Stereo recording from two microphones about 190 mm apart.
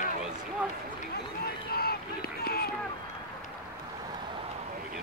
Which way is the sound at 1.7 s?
55° left (ahead or behind).